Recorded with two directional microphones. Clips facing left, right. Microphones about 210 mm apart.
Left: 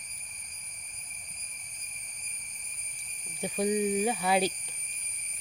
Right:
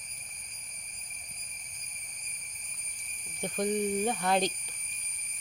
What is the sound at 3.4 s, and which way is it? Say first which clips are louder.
Speech: left 2 dB; 5° left (ahead or behind).